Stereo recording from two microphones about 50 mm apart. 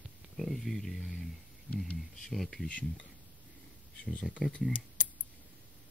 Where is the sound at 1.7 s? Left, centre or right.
Left.